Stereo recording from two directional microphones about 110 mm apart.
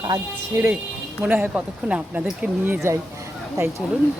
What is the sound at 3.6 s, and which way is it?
Speech, 30° right (ahead or behind).